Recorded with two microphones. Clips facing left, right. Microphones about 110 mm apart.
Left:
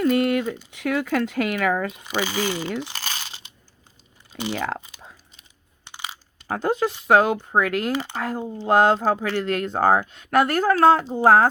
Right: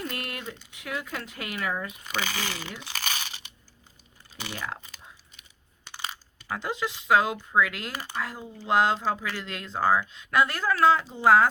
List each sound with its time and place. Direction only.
0.0 s speech: 65° left (ahead or behind)
2.0 s speech: 15° left (ahead or behind)
3.0 s crunch: 30° left (ahead or behind)
4.5 s speech: 65° left (ahead or behind)
5.8 s coin: 15° left (ahead or behind)
6.5 s speech: 50° left (ahead or behind)
9.2 s speech: 65° left (ahead or behind)